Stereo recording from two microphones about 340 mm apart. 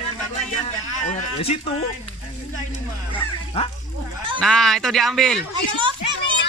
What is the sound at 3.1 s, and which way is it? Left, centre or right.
Bow-wow, centre.